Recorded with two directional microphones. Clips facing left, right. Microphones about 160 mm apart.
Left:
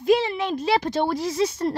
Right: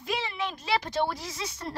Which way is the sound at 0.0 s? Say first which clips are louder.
Left 12 dB; 50° left (ahead or behind).